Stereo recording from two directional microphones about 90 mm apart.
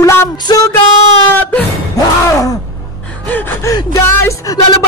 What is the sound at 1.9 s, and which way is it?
Speech, 40° left (ahead or behind).